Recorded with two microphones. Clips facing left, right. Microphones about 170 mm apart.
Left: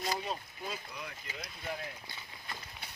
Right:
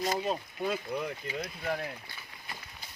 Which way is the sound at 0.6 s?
70° right (ahead or behind).